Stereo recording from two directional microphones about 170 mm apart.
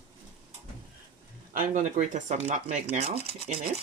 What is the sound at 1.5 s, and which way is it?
Speech, 50° right (ahead or behind).